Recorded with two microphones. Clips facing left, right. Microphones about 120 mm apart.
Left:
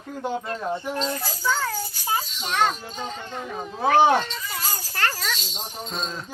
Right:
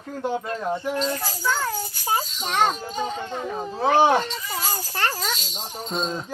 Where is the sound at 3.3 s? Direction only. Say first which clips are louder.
Right 3 dB; 30° right (ahead or behind).